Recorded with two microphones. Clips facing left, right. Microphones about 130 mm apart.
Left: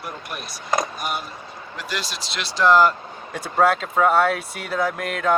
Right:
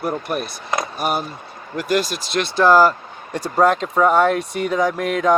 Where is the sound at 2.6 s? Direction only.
35° right (ahead or behind).